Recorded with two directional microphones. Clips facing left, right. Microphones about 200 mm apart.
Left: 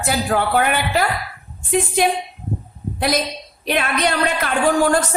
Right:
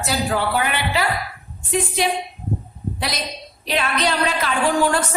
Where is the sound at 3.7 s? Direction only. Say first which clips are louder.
Left 2 dB; 55° left (ahead or behind).